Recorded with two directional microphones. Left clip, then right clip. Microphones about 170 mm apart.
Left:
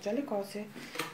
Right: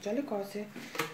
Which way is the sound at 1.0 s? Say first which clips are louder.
Right 3 dB; 40° right (ahead or behind).